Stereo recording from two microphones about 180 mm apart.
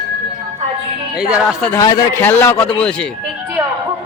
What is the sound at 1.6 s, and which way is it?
Speech, 10° left (ahead or behind).